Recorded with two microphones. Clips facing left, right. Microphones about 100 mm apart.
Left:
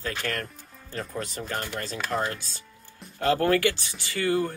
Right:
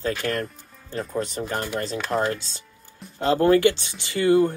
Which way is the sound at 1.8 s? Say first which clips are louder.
Right 5 dB; 30° right (ahead or behind).